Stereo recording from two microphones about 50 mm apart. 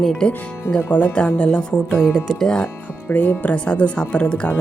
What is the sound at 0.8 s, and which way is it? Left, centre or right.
A woman's voice, left.